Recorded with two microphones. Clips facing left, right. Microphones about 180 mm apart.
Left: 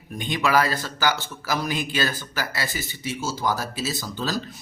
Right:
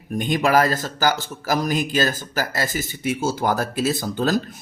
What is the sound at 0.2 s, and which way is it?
A man's voice, 45° right (ahead or behind).